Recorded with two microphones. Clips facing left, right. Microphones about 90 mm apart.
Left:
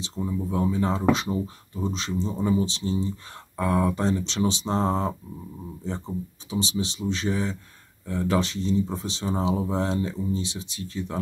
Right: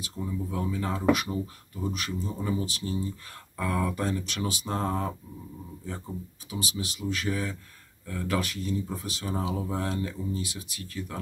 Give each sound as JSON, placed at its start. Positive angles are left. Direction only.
{"t": 0.0, "sound": "speech", "side_deg": 25}